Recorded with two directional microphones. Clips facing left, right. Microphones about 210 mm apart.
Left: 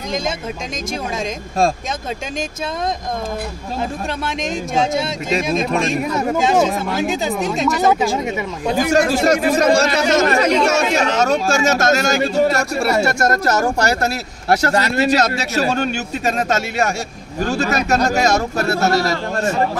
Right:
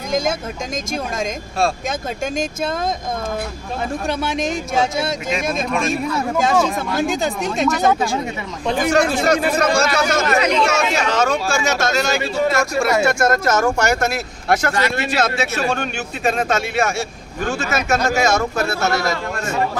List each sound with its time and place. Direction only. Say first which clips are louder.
4.2 s speech: right 1 dB; centre (ahead or behind)
7.0 s speech: right 1 dB; centre (ahead or behind)
9.1 s speech: left 2 dB; 40° left (ahead or behind)